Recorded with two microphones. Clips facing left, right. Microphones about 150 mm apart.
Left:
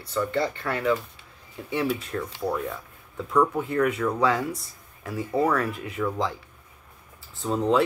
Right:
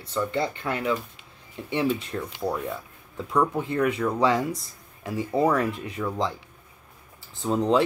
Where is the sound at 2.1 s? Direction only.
15° right (ahead or behind).